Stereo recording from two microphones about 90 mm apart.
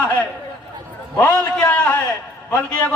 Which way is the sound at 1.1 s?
15° left (ahead or behind).